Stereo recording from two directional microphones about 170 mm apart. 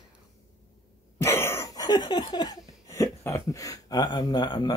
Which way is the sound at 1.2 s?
15° left (ahead or behind).